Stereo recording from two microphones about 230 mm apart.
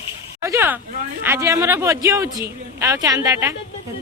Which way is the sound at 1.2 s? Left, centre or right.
Centre.